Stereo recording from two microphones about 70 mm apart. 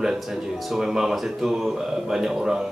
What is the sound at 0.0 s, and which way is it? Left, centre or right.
Speech, centre.